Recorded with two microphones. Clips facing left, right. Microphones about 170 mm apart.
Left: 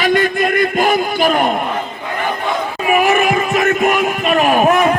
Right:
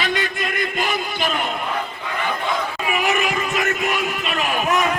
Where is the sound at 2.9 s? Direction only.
55° left (ahead or behind).